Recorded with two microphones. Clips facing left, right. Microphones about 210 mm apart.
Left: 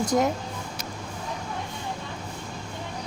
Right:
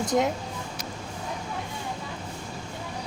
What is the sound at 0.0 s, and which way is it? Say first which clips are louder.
Speech: left 1 dB; centre (ahead or behind).